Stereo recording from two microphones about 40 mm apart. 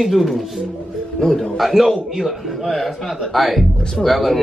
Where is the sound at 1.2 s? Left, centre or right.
Centre.